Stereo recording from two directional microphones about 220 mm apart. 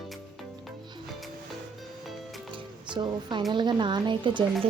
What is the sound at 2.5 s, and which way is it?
Music, 20° right (ahead or behind).